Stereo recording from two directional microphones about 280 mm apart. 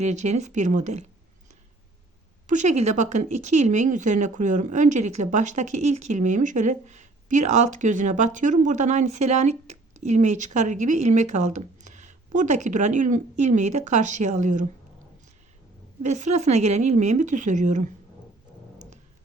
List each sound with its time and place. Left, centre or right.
0.0 s speech: right
2.5 s speech: right
16.0 s speech: right